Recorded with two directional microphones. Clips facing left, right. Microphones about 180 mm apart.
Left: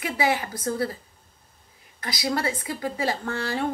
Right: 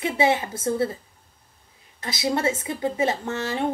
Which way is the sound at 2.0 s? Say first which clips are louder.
Right 3 dB; 25° right (ahead or behind).